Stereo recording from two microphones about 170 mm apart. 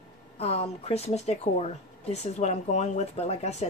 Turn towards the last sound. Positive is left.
turn(degrees=40)  # may be behind; listen again after turning